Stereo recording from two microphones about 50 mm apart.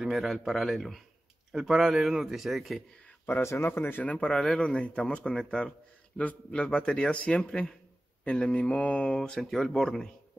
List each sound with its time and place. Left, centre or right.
0.1 s a man's voice: centre
1.5 s a man's voice: centre
3.4 s speech: left
4.0 s speech: left
4.3 s speech: centre
4.6 s speech: left
9.4 s a man's voice: centre